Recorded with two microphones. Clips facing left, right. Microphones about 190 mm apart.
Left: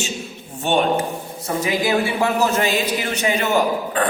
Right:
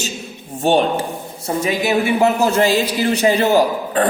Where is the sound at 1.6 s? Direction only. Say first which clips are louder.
Right 2 dB; 25° right (ahead or behind).